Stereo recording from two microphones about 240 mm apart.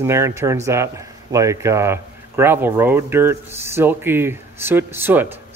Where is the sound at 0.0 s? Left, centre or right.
Centre.